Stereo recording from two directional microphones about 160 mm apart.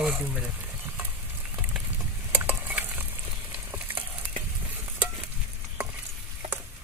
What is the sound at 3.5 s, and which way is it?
Frying, 10° right (ahead or behind).